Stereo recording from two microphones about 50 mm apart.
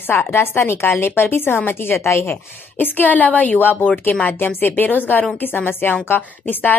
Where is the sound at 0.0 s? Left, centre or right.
Left.